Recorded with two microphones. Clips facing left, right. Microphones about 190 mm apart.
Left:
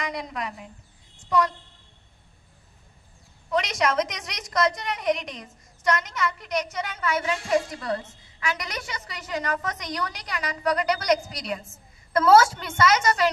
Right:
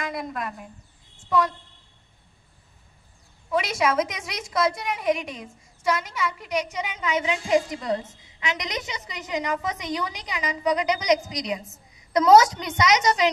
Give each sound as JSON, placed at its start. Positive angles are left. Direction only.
{"t": 0.1, "sound": "a woman's voice", "side_deg": -5}
{"t": 3.4, "sound": "a woman's voice", "side_deg": -5}